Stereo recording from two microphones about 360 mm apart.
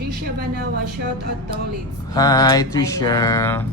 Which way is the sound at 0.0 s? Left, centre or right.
Right.